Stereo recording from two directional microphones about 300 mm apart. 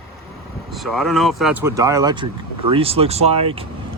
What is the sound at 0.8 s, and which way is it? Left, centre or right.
Speech, centre.